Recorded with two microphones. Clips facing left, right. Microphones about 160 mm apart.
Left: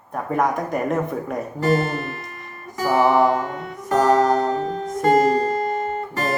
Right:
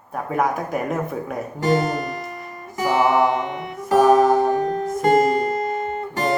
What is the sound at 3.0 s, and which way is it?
Music, 15° right (ahead or behind).